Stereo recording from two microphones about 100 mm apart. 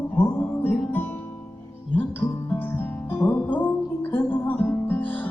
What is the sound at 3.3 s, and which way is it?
Music, 15° left (ahead or behind).